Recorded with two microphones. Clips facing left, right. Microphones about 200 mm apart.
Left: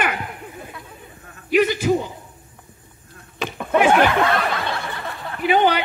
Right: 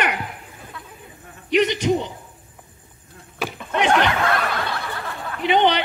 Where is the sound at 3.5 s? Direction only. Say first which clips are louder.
Left 9 dB; 55° left (ahead or behind).